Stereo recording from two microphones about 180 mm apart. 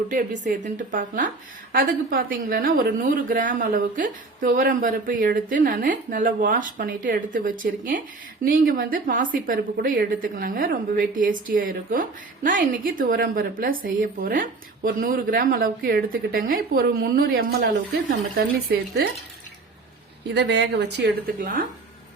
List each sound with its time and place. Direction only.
0.4 s a woman's voice: 45° right (ahead or behind)
20.3 s a woman's voice: 75° right (ahead or behind); by 21.7 s 50° right (ahead or behind)